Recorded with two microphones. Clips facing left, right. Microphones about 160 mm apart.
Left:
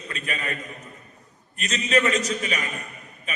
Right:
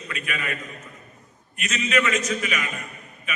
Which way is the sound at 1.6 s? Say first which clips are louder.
Left 1 dB; 35° left (ahead or behind).